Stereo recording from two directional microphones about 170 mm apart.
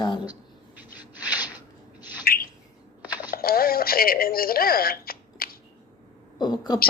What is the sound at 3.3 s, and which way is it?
Speech, 60° left (ahead or behind).